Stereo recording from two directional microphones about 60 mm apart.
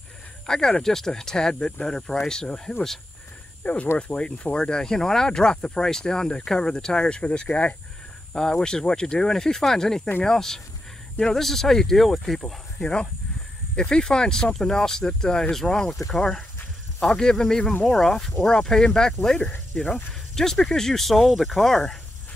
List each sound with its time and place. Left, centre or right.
0.5 s speech: centre
3.6 s speech: left; by 12.5 s centre
12.8 s speech: centre